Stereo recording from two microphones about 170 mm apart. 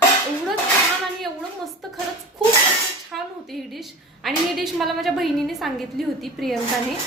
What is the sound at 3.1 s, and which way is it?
A woman's voice, centre (ahead or behind).